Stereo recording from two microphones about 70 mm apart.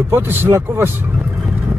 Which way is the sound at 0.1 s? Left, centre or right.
Right.